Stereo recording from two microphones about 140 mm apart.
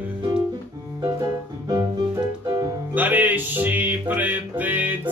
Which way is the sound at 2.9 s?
10° right (ahead or behind).